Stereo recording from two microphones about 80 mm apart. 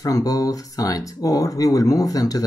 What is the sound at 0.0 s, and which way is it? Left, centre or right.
Speech, left.